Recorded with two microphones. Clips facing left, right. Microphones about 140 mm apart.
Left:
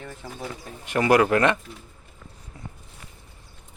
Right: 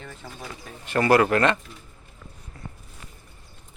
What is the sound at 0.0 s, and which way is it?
Bird, 15° left (ahead or behind).